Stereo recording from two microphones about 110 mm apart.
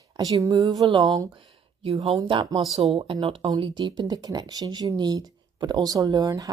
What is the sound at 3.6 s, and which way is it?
Speech, 45° right (ahead or behind).